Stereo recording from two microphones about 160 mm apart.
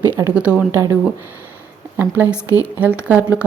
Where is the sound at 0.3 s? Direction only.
5° right (ahead or behind).